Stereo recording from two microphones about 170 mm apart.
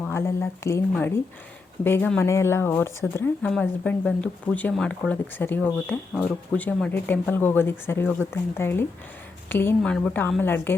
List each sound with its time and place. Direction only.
0.0 s speech: 15° left (ahead or behind)